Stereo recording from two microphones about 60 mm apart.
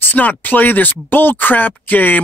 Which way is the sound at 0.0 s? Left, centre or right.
Left.